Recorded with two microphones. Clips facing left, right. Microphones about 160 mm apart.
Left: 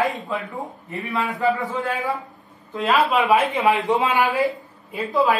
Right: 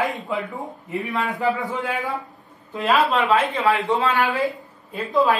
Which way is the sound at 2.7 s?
Centre (ahead or behind).